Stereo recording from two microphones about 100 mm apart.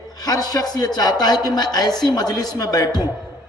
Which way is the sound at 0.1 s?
40° left (ahead or behind).